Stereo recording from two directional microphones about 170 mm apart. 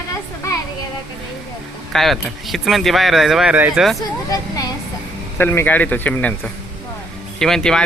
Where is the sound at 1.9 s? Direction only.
Centre (ahead or behind).